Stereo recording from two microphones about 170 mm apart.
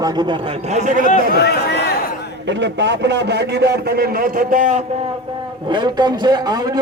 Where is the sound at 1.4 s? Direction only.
75° left (ahead or behind).